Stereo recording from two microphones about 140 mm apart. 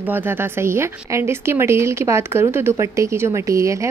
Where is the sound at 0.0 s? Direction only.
15° right (ahead or behind).